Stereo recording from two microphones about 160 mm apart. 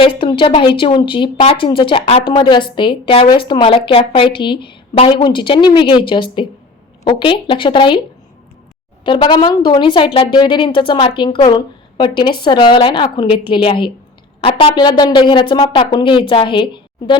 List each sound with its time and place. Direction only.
0.0 s speech: 30° left (ahead or behind)
9.0 s a woman's voice: 30° left (ahead or behind)